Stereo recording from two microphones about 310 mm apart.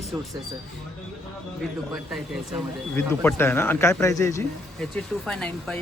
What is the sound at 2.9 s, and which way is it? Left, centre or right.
Speech, centre.